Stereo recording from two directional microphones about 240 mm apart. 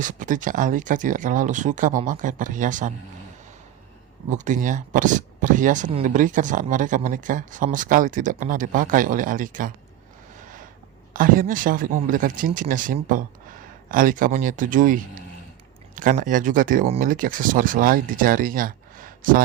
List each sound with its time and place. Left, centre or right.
0.0 s speech: right
4.3 s speech: right
11.1 s speech: right
16.0 s speech: right